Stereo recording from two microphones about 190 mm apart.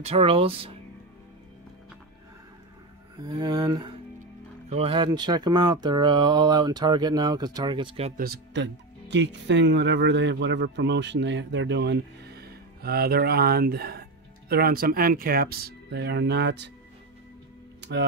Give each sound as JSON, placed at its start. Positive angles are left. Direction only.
{"t": 0.0, "sound": "speech", "side_deg": -30}
{"t": 3.2, "sound": "speech", "side_deg": -20}
{"t": 4.6, "sound": "speech", "side_deg": -30}
{"t": 8.2, "sound": "speech", "side_deg": -55}
{"t": 9.1, "sound": "speech", "side_deg": -70}
{"t": 17.7, "sound": "music", "side_deg": -65}